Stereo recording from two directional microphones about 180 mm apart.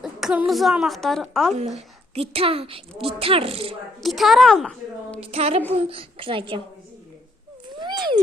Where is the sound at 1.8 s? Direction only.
35° right (ahead or behind).